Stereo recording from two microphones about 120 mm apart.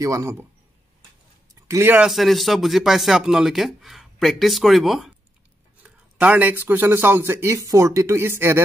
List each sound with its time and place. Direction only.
0.0 s speech: 25° right (ahead or behind)
1.5 s a sound: 20° right (ahead or behind)
2.0 s speech: centre (ahead or behind); by 8.6 s 20° right (ahead or behind)